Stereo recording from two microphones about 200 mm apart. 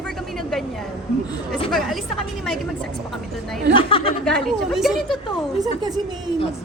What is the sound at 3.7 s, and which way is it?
Speech, 25° left (ahead or behind).